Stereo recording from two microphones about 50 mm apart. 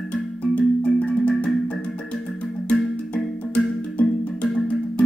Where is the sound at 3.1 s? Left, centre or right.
Left.